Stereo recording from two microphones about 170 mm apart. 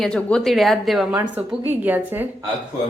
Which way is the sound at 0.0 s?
5° left (ahead or behind).